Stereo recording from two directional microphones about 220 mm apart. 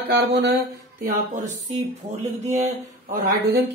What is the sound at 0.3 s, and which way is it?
Speech, 50° right (ahead or behind).